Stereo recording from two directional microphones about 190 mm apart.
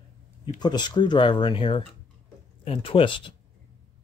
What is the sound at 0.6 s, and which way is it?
Speech, 20° left (ahead or behind).